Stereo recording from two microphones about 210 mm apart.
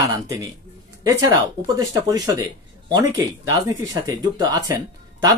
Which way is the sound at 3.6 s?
15° right (ahead or behind).